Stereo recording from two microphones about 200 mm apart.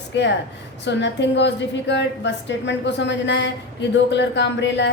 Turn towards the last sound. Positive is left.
turn(degrees=60)  # may be behind; listen again after turning